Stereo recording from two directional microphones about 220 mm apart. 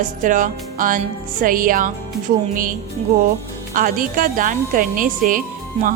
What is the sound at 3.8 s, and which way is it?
Speech, 40° right (ahead or behind).